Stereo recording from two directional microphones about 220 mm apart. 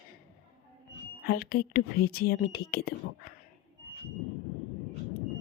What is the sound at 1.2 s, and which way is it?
Speech, 45° left (ahead or behind).